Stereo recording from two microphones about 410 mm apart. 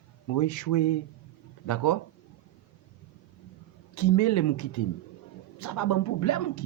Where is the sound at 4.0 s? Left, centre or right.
Left.